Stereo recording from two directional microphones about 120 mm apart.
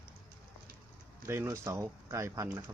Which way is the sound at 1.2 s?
25° right (ahead or behind).